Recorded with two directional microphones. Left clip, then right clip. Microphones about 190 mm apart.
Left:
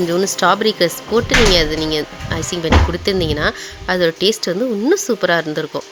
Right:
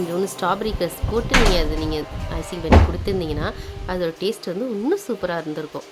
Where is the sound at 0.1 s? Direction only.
20° left (ahead or behind).